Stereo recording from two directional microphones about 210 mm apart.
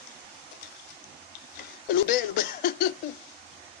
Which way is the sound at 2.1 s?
45° left (ahead or behind).